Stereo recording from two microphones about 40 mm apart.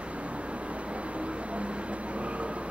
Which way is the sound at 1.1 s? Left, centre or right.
Right.